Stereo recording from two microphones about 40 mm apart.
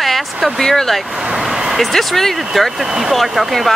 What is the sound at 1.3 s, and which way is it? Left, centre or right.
Vehicle, centre.